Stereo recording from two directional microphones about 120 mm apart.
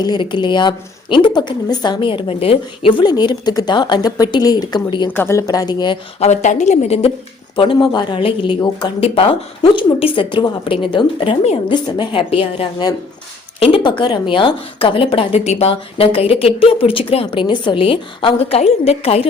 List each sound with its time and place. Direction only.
0.0 s a woman's voice: 40° left (ahead or behind)
5.1 s a woman's voice: 20° left (ahead or behind); by 6.0 s 35° left (ahead or behind)
6.1 s a woman's voice: 75° left (ahead or behind)
7.5 s speech: 45° left (ahead or behind)
9.0 s speech: 55° left (ahead or behind)